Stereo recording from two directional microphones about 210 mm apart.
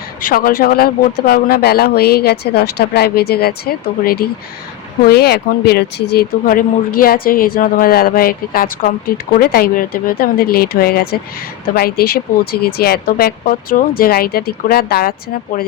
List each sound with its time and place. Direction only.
0.2 s speech: 45° left (ahead or behind)